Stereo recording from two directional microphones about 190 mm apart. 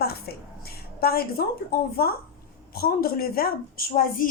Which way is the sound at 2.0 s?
55° left (ahead or behind).